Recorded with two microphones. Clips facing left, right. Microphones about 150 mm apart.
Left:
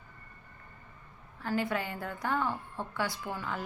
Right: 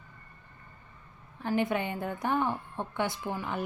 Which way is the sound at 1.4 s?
20° right (ahead or behind).